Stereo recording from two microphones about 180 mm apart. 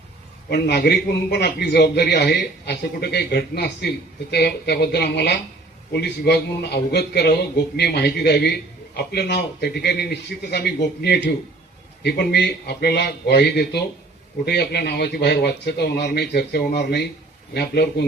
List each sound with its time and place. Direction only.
0.5 s a man's voice: 65° left (ahead or behind)